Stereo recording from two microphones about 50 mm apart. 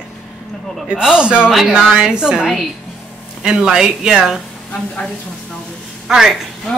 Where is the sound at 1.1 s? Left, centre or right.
Centre.